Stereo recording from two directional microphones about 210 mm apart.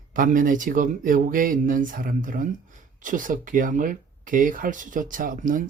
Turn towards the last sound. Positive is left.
turn(degrees=-40)  # may be behind; listen again after turning